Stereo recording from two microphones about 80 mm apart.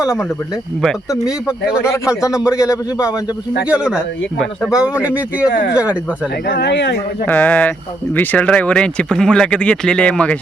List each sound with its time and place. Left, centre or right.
0.0 s speech: centre
3.7 s speech: centre
7.3 s speech: centre